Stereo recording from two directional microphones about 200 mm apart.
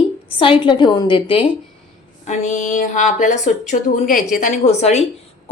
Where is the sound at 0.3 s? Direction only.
25° left (ahead or behind).